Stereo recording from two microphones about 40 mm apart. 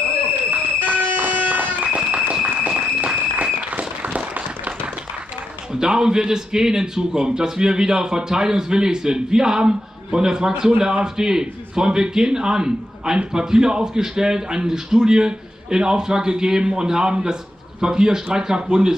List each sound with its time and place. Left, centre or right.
0.5 s run: right
2.0 s applause: right
5.7 s a man's voice: centre